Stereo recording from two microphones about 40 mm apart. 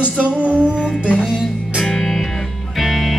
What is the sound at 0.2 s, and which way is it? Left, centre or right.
Music, right.